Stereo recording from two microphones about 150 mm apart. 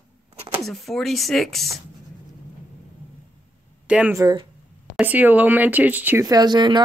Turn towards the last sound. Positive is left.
turn(degrees=-30)  # may be behind; listen again after turning